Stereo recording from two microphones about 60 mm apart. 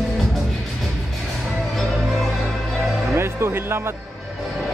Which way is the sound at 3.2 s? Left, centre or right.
Right.